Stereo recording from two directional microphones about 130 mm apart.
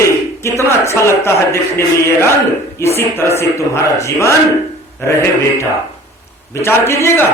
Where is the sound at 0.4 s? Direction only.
20° left (ahead or behind).